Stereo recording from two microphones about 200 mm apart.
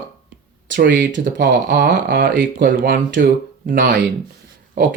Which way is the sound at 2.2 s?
55° right (ahead or behind).